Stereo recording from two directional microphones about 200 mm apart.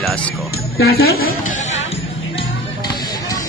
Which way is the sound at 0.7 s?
50° left (ahead or behind).